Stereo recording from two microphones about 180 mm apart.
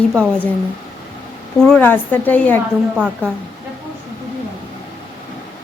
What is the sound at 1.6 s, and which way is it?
A woman's voice, 5° left (ahead or behind).